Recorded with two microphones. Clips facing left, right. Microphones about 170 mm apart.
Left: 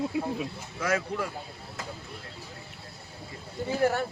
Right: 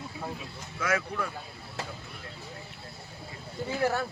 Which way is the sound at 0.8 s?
30° left (ahead or behind).